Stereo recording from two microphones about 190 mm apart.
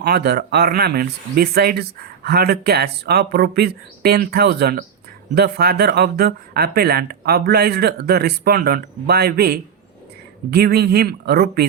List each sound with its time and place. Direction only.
0.0 s speech: 55° right (ahead or behind)